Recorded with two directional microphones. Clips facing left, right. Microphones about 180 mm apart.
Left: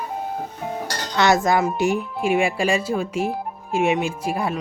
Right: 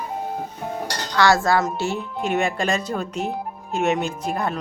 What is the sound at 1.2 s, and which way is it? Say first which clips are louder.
Speech: even; 20° left (ahead or behind).